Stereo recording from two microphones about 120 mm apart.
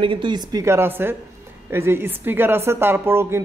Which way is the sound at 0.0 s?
45° right (ahead or behind).